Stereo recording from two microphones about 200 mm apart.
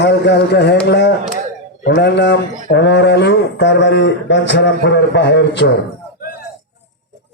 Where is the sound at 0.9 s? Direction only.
55° left (ahead or behind).